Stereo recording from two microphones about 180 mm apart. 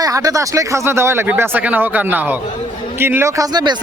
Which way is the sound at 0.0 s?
20° right (ahead or behind).